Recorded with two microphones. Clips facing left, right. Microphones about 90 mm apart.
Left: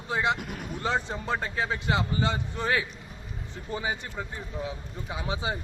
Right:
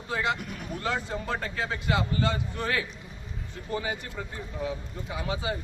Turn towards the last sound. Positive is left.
turn(degrees=25)  # may be behind; listen again after turning